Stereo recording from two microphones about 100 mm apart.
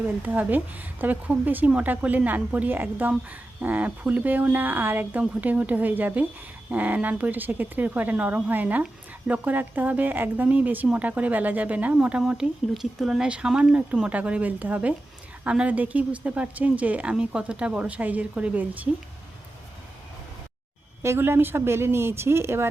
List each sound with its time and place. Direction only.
0.2 s speech: 15° right (ahead or behind)
21.0 s speech: 25° right (ahead or behind)